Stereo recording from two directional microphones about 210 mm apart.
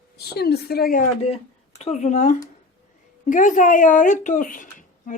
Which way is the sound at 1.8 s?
35° left (ahead or behind).